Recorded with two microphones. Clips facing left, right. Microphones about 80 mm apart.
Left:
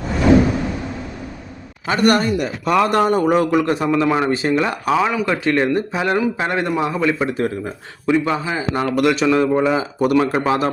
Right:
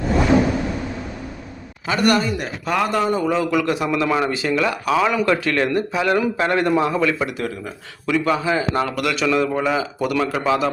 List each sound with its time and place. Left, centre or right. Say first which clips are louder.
1.9 s speech: left 2 dB; left
2.4 s a man's voice: left 5 dB; left
3.5 s speech: left 3 dB; left
3.8 s a man's voice: left 3 dB; left
4.3 s speech: left 2 dB; left
4.9 s a man's voice: right 3 dB; centre
7.3 s speech: left 5 dB; left
8.0 s a man's voice: left 1 dB; left
9.0 s a man's voice: left 7 dB; left